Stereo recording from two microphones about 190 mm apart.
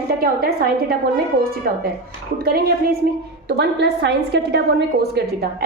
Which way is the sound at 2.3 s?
55° right (ahead or behind).